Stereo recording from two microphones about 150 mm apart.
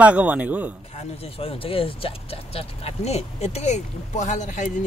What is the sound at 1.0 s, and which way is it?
Speech, 40° left (ahead or behind).